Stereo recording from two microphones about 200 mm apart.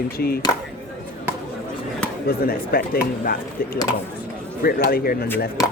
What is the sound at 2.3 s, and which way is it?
Speech, 50° left (ahead or behind).